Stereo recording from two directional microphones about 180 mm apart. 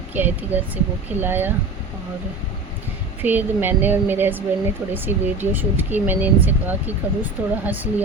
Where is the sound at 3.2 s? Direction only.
10° right (ahead or behind).